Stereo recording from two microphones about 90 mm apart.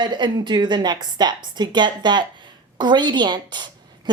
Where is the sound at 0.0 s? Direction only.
55° right (ahead or behind).